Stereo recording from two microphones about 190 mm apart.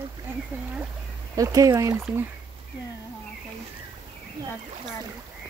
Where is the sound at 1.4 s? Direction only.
15° right (ahead or behind).